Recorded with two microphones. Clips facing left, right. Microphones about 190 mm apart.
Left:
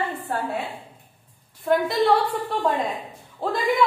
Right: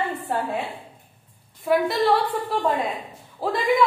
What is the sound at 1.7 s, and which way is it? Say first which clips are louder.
Speech: even; centre (ahead or behind).